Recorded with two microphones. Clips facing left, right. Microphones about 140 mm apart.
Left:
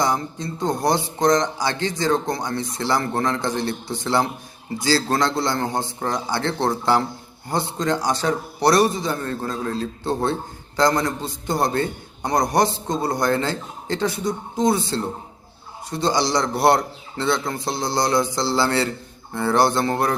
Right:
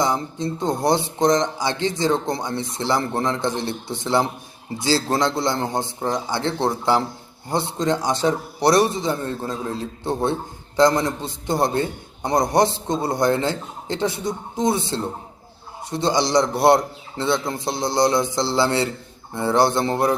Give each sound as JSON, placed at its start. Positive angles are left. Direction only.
{"t": 0.0, "sound": "speech", "side_deg": -25}